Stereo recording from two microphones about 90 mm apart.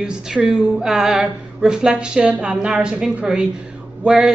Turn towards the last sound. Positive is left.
turn(degrees=-5)  # may be behind; listen again after turning